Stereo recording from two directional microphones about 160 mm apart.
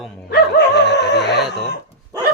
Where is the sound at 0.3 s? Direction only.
85° left.